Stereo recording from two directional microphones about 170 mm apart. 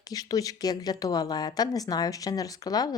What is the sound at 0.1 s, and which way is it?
Speech, 20° left (ahead or behind).